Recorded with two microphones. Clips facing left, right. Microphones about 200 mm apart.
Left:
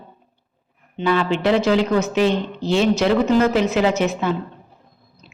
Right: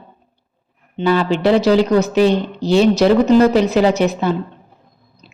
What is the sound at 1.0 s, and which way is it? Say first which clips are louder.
Speech: right 4 dB; 35° right (ahead or behind).